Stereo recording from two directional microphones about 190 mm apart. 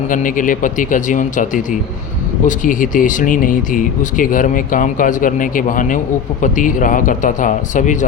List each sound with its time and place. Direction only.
0.1 s speech: 45° left (ahead or behind)